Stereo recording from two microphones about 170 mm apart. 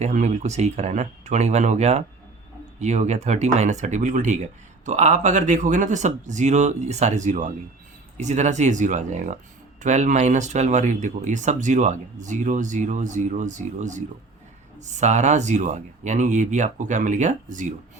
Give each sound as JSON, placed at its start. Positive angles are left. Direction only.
{"t": 0.0, "sound": "speech", "side_deg": -45}